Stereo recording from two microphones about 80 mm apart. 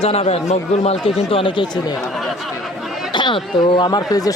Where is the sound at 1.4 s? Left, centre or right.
Left.